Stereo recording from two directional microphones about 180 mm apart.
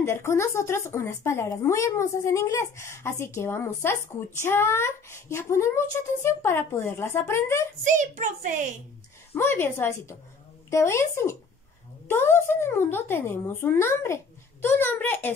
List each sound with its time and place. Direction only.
0.0 s speech: 15° left (ahead or behind)
7.8 s a child's voice: 45° right (ahead or behind)
9.3 s speech: 10° left (ahead or behind)